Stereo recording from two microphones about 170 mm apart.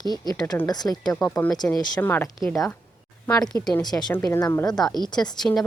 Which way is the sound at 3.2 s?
20° left (ahead or behind).